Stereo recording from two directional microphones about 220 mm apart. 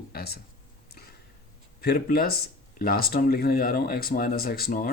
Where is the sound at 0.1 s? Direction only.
45° left (ahead or behind).